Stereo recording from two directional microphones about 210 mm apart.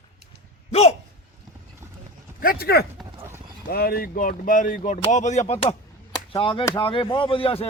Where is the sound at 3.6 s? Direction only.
45° left (ahead or behind).